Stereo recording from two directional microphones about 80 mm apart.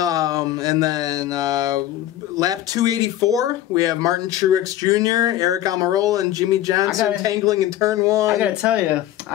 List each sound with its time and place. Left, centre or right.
0.0 s a sound: right
2.3 s speech: right
8.4 s speech: centre